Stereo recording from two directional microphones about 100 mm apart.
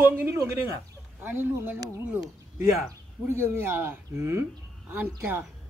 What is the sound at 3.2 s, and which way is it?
Speech, 25° right (ahead or behind).